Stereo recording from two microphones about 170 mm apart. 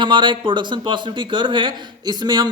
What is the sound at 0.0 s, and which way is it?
A man's voice, 30° right (ahead or behind).